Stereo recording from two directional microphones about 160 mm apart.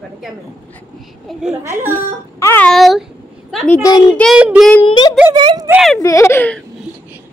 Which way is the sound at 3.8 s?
25° left (ahead or behind).